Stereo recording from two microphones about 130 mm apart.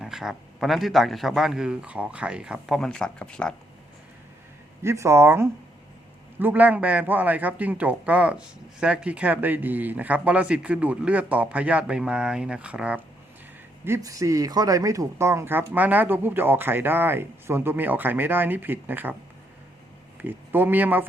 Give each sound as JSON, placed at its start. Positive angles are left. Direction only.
{"t": 0.0, "sound": "a man's voice", "side_deg": -5}
{"t": 4.8, "sound": "a man's voice", "side_deg": -20}
{"t": 13.8, "sound": "a man's voice", "side_deg": -20}
{"t": 20.2, "sound": "a man's voice", "side_deg": -15}